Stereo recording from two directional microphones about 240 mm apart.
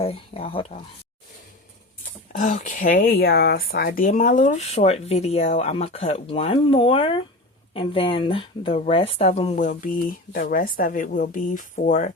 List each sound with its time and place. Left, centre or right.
0.0 s speech: left
2.3 s speech: left